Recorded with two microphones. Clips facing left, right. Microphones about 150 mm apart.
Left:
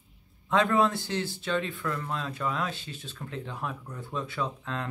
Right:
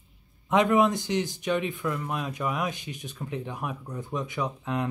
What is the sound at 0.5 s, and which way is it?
Speech, 15° right (ahead or behind).